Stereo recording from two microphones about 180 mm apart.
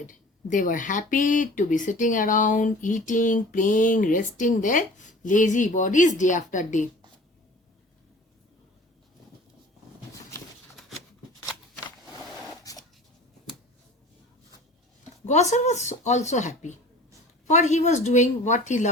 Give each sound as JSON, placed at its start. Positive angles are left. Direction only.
{"t": 0.0, "sound": "speech", "side_deg": 45}
{"t": 12.7, "sound": "a sound", "side_deg": 20}
{"t": 15.3, "sound": "speech", "side_deg": 40}